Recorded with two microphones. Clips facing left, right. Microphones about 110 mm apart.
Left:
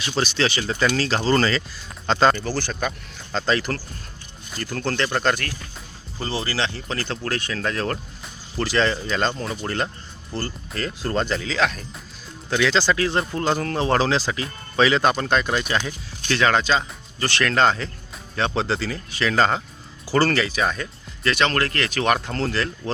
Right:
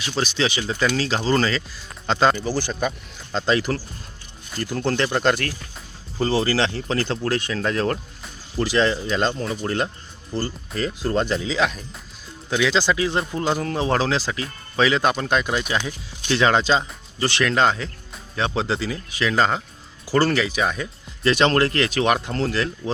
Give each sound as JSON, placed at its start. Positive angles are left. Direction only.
{"t": 0.0, "sound": "speech", "side_deg": -5}
{"t": 7.2, "sound": "speech", "side_deg": -20}
{"t": 7.6, "sound": "speech", "side_deg": -5}
{"t": 9.3, "sound": "speech", "side_deg": 0}
{"t": 16.2, "sound": "speech", "side_deg": -20}
{"t": 17.5, "sound": "speech", "side_deg": -5}
{"t": 21.2, "sound": "speech", "side_deg": -25}
{"t": 22.3, "sound": "speech", "side_deg": -5}